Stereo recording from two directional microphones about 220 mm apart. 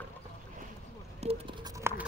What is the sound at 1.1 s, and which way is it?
Scratch, 25° right (ahead or behind).